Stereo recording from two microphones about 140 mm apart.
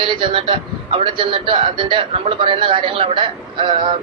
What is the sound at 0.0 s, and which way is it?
A man's voice, 35° right (ahead or behind).